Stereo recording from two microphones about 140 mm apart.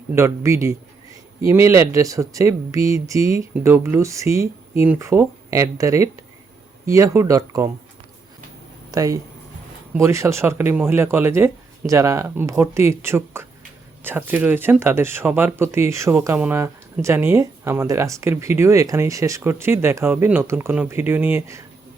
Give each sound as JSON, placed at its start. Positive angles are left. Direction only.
{"t": 0.1, "sound": "speech", "side_deg": -20}
{"t": 8.9, "sound": "speech", "side_deg": -25}